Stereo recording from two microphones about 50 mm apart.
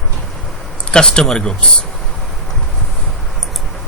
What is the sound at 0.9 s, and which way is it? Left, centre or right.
Speech, centre.